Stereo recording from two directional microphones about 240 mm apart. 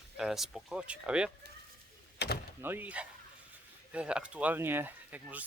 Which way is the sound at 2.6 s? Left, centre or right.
Centre.